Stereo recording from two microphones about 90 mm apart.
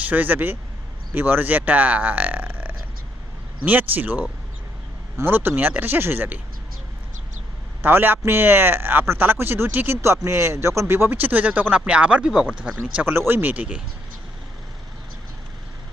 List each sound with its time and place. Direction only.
0.1 s speech: 20° right (ahead or behind)
7.8 s speech: 25° right (ahead or behind)
13.0 s speech: 25° right (ahead or behind)